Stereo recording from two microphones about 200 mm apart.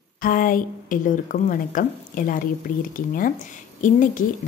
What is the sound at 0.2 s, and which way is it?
A woman's voice, 45° left (ahead or behind).